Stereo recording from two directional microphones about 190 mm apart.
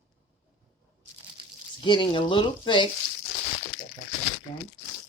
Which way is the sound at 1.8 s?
25° left (ahead or behind).